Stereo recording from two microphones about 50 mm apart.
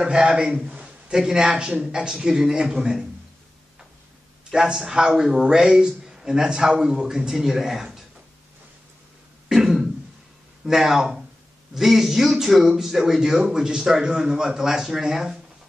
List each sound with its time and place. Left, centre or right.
0.0 s speech: centre
0.7 s a sound: right
1.1 s speech: centre
4.5 s speech: centre
9.5 s throat clearing: centre
10.6 s speech: centre